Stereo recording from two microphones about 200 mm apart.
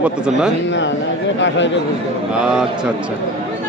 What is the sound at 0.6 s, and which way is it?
A man's voice, 65° left (ahead or behind).